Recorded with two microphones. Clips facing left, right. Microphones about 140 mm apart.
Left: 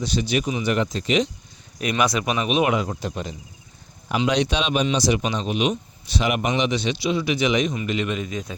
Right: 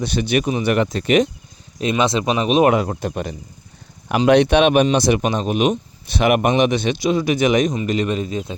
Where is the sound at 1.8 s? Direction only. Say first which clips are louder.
Right 4 dB; 25° right (ahead or behind).